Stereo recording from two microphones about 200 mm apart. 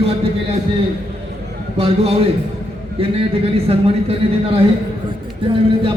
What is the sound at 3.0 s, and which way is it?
Speech, 30° right (ahead or behind).